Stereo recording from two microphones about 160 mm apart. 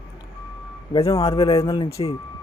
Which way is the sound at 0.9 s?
35° left (ahead or behind).